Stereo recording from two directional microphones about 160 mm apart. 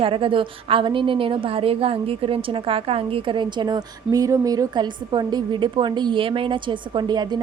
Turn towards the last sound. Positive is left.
turn(degrees=-25)  # may be behind; listen again after turning